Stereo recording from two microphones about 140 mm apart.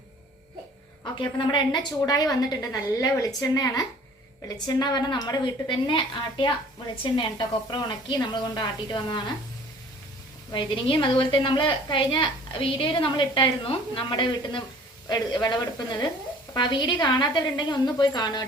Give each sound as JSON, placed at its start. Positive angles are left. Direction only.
{"t": 1.0, "sound": "a woman's voice", "side_deg": 35}
{"t": 10.5, "sound": "a woman's voice", "side_deg": 35}
{"t": 16.6, "sound": "a woman's voice", "side_deg": 30}